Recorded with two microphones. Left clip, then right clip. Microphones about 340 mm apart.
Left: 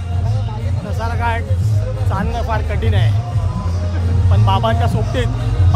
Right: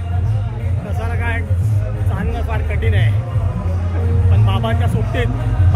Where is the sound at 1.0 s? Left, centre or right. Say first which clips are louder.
Left 4 dB; centre.